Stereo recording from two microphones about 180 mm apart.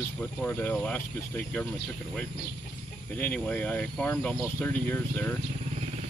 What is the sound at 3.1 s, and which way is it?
Speech, 10° left (ahead or behind).